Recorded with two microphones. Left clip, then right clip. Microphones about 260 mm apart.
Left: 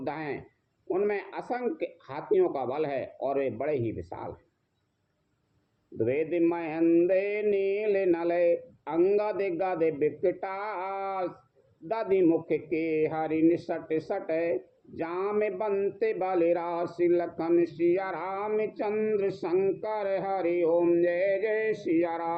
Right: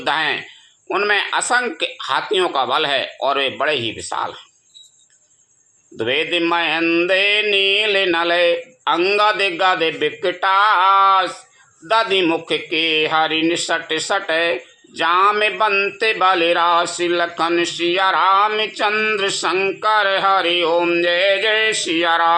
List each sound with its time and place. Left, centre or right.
0.0 s speech: right
6.0 s mantra: right
9.1 s speech: right
21.8 s mantra: right